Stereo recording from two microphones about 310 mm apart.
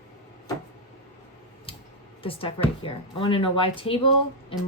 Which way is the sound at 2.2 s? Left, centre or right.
Centre.